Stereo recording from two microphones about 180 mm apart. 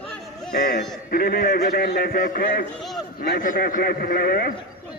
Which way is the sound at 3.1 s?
60° left (ahead or behind).